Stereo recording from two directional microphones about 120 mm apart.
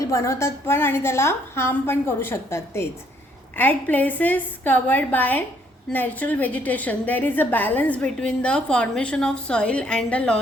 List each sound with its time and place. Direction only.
0.0 s a woman's voice: 25° left (ahead or behind); by 10.4 s 10° left (ahead or behind)